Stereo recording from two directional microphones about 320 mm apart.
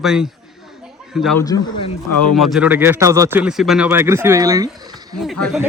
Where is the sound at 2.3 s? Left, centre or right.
Centre.